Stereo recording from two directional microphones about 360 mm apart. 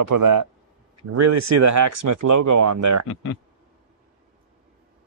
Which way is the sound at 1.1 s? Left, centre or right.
Right.